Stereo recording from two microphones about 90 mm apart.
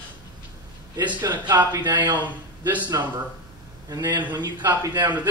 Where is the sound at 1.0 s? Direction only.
50° right (ahead or behind).